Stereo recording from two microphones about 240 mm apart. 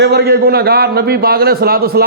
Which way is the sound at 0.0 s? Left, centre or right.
Right.